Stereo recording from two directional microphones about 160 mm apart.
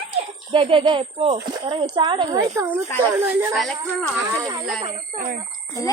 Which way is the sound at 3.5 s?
Centre (ahead or behind).